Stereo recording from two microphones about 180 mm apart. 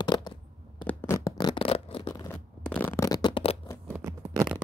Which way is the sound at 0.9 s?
15° left (ahead or behind).